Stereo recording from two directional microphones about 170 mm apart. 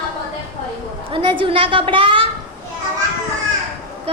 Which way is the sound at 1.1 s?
30° right (ahead or behind).